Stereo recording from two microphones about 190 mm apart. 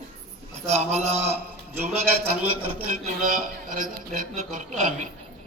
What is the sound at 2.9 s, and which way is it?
A man's voice, 45° right (ahead or behind).